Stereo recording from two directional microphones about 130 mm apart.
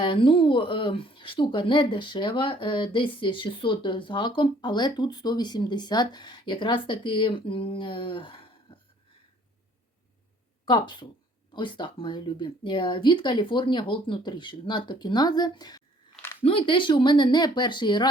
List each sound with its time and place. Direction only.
0.0 s speech: 40° left (ahead or behind)
10.7 s speech: 35° left (ahead or behind)
16.4 s speech: 45° left (ahead or behind)